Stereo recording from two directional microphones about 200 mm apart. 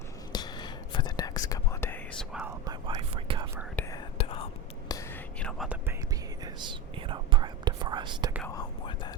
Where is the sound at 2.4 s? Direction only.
20° right (ahead or behind).